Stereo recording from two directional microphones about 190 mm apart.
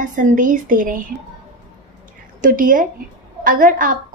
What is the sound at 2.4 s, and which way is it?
A woman's voice, 45° right (ahead or behind).